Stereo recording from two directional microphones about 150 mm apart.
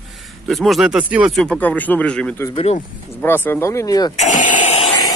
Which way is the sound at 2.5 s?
40° left (ahead or behind).